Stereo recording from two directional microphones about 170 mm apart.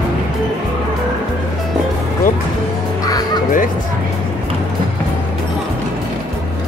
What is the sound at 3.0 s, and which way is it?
Crow, 20° left (ahead or behind).